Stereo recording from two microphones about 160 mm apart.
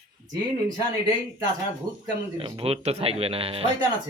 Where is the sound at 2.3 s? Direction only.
35° right (ahead or behind).